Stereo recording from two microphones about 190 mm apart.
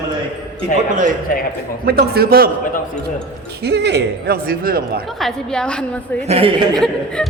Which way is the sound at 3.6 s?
60° right (ahead or behind).